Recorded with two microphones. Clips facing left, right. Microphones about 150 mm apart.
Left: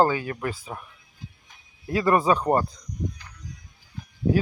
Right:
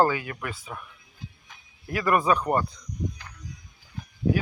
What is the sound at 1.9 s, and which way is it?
Speech, 25° left (ahead or behind).